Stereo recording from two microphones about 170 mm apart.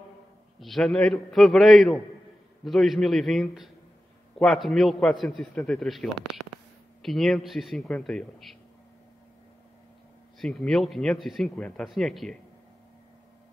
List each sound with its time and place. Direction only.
0.6 s speech: centre (ahead or behind)
10.4 s speech: 5° left (ahead or behind)